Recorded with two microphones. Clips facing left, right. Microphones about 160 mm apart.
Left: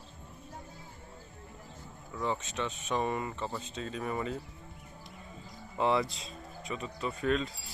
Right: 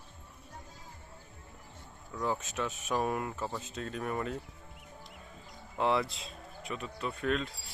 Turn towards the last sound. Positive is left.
turn(degrees=0)  # may be behind; listen again after turning